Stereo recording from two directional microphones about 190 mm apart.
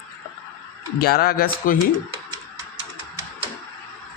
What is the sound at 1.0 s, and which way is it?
Speech, 50° left (ahead or behind).